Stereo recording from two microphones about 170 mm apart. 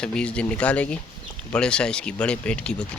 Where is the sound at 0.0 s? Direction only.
5° left (ahead or behind).